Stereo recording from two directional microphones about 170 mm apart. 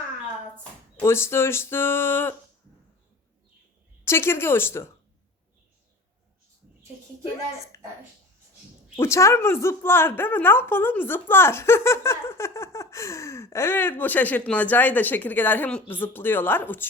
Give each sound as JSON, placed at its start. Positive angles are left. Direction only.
{"t": 1.0, "sound": "a woman's voice", "side_deg": 15}
{"t": 4.0, "sound": "a woman's voice", "side_deg": 15}
{"t": 7.2, "sound": "a woman's voice", "side_deg": 15}
{"t": 9.0, "sound": "a woman's voice", "side_deg": 15}